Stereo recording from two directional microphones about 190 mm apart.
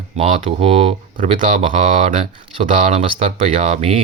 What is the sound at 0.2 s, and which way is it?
Speech, 30° right (ahead or behind).